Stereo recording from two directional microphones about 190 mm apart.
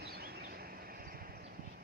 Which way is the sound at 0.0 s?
55° right (ahead or behind).